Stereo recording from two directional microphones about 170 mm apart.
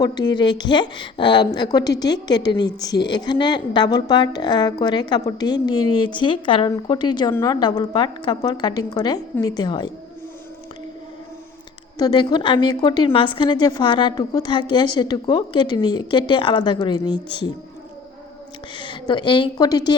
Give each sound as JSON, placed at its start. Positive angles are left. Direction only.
{"t": 0.0, "sound": "a woman's voice", "side_deg": 25}
{"t": 11.9, "sound": "a woman's voice", "side_deg": 25}
{"t": 18.8, "sound": "a woman's voice", "side_deg": 25}